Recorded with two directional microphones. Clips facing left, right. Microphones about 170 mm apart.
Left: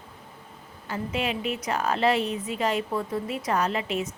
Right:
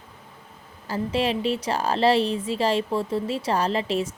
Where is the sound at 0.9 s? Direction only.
35° right (ahead or behind).